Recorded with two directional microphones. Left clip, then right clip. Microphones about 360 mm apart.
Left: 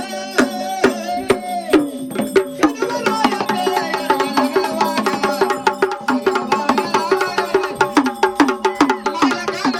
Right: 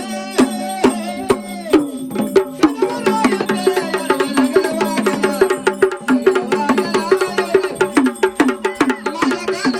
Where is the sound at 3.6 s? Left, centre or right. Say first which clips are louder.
Right 2 dB; left.